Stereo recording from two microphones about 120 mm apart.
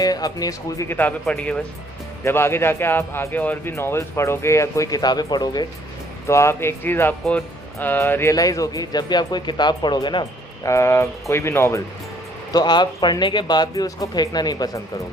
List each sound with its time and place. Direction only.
0.0 s speech: 35° left (ahead or behind)
0.9 s speech: 15° left (ahead or behind); by 5.6 s 35° left (ahead or behind)
6.2 s speech: 25° left (ahead or behind); by 10.2 s 40° left (ahead or behind)
10.6 s speech: 25° left (ahead or behind)
12.5 s speech: 35° left (ahead or behind)